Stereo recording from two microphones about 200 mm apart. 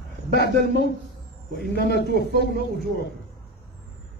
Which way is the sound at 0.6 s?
60° left (ahead or behind).